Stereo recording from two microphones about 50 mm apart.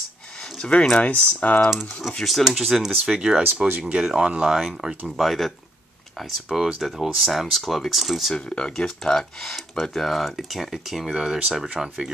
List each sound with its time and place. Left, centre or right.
0.7 s speech: left
1.1 s speech: left
2.0 s speech: centre
5.1 s speech: centre
8.4 s speech: centre
11.7 s speech: centre